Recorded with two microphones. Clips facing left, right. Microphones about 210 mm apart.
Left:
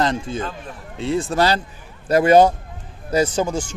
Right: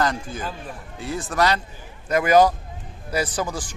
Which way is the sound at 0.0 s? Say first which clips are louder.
Left 3 dB; 25° left (ahead or behind).